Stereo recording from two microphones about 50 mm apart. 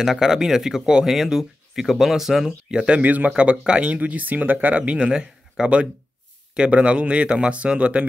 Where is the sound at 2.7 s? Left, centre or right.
Centre.